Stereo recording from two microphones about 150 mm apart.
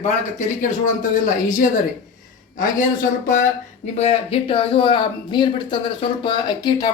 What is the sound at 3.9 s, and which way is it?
Speech, 40° left (ahead or behind).